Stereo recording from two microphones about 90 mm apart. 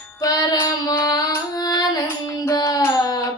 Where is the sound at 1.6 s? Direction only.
45° left (ahead or behind).